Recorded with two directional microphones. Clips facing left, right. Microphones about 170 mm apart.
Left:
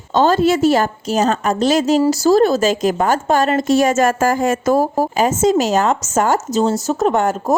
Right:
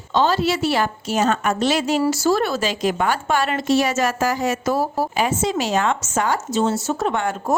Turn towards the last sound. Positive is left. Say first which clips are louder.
# left 6 dB
turn(degrees=40)  # may be behind; listen again after turning